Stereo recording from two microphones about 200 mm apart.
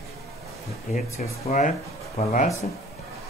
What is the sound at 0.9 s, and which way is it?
Speech, 40° left (ahead or behind).